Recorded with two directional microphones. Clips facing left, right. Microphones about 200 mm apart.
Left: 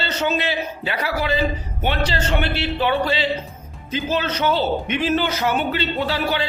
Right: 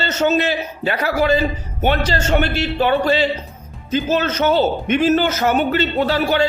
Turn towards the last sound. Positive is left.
turn(degrees=-45)  # may be behind; listen again after turning